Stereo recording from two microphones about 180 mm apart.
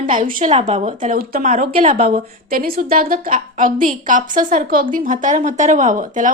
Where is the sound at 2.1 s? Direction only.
55° right (ahead or behind).